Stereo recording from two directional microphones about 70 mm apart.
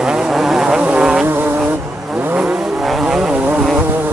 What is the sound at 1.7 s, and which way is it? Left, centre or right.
Vehicle, right.